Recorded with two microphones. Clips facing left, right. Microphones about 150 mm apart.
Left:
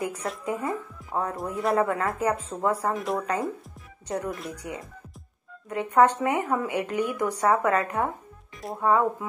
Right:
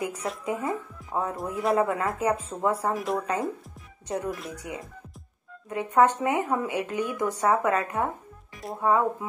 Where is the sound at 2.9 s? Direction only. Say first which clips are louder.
Even; centre (ahead or behind).